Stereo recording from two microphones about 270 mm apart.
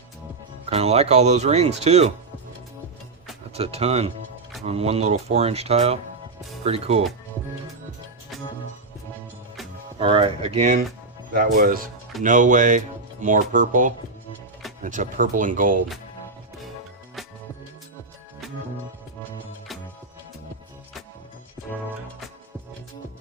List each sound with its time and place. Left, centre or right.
0.6 s speech: right
3.5 s speech: right
10.0 s speech: centre